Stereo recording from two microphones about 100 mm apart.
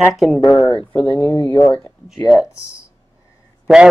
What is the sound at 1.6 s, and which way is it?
Speech, 25° left (ahead or behind).